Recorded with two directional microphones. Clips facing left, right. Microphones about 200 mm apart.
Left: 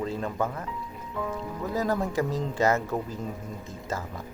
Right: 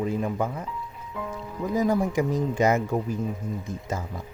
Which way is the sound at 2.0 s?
15° right (ahead or behind).